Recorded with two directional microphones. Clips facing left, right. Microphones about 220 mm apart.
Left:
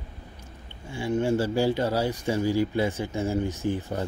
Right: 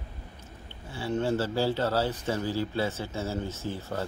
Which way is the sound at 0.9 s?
15° left (ahead or behind).